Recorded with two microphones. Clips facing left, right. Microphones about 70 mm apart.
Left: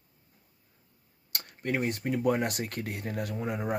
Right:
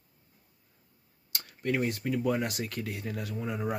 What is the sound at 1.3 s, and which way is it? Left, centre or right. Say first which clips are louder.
Tick-tock: left 1 dB; left.